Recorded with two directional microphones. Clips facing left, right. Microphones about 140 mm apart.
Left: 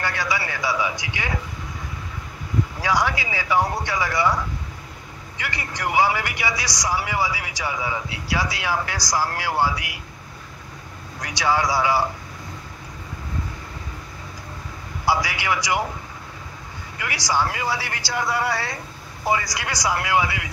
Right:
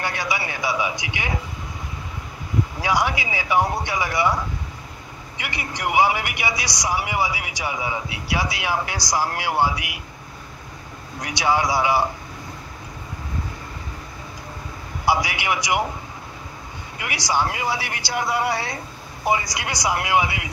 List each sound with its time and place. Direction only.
0.0 s a man's voice: 15° right (ahead or behind)
2.8 s a man's voice: 15° right (ahead or behind)
5.4 s a man's voice: 15° right (ahead or behind)
11.1 s a man's voice: 15° right (ahead or behind)
15.0 s a man's voice: 20° right (ahead or behind)
17.3 s a man's voice: 20° right (ahead or behind)